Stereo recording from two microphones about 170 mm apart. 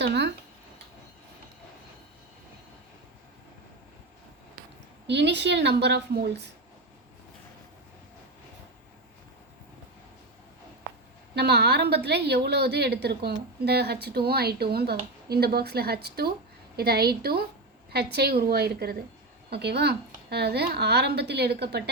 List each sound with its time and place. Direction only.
0.0 s a woman's voice: 80° right
5.0 s a woman's voice: 90° right
11.3 s a woman's voice: 75° right (ahead or behind)